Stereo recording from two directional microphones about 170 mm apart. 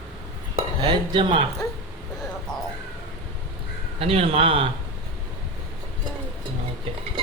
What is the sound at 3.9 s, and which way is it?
Speech, 35° right (ahead or behind).